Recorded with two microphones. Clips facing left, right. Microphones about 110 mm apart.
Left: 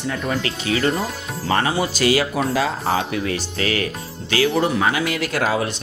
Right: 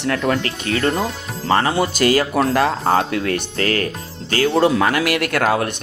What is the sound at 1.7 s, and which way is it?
Speech, 50° right (ahead or behind).